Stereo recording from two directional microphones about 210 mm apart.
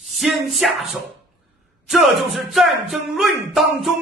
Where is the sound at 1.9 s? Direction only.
Centre (ahead or behind).